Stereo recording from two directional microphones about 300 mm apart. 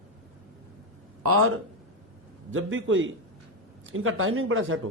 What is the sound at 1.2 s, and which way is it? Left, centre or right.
A man's voice, right.